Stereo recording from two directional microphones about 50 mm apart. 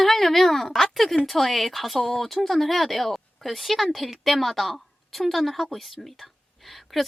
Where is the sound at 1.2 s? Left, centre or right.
Centre.